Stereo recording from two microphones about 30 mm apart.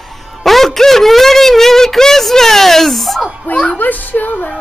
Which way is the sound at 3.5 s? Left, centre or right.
Left.